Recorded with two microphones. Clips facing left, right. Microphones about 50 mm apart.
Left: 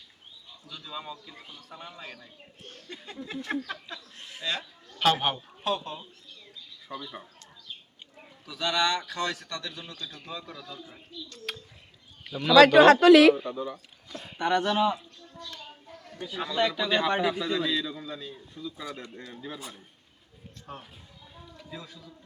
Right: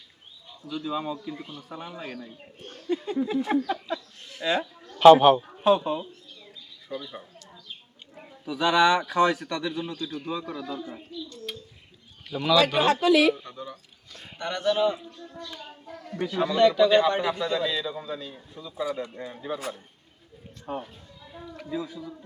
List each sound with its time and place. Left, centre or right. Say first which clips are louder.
0.7 s a man's voice: right 9 dB; centre
4.2 s a sound: right 2 dB; centre
4.9 s a man's voice: right 12 dB; centre
5.6 s speech: right 9 dB; centre
6.8 s speech: right 3 dB; centre
8.4 s a man's voice: right 7 dB; centre
11.5 s bird: even; left
12.3 s speech: right 2 dB; centre
12.5 s speech: left 8 dB; left
14.3 s speech: left 1 dB; centre
16.6 s a man's voice: right 7 dB; centre
20.7 s a man's voice: right 10 dB; centre